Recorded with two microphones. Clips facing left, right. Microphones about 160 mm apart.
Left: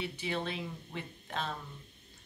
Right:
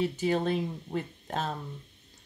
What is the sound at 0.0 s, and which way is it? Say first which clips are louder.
Speech: right 9 dB; 40° right (ahead or behind).